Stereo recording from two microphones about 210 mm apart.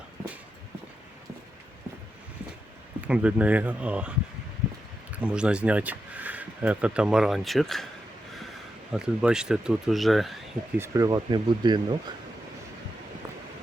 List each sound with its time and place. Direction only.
3.1 s speech: 5° right (ahead or behind)
5.1 s speech: 5° right (ahead or behind)
8.9 s speech: 5° right (ahead or behind)
10.8 s speech: 15° right (ahead or behind)